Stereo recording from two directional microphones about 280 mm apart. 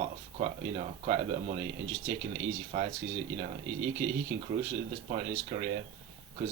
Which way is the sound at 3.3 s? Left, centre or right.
Centre.